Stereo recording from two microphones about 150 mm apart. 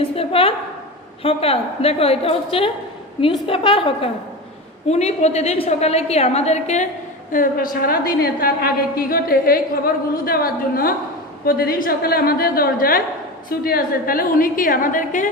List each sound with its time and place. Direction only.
0.2 s a sound: 40° left (ahead or behind)
1.2 s a woman's voice: 40° left (ahead or behind)
7.3 s a woman's voice: 65° left (ahead or behind)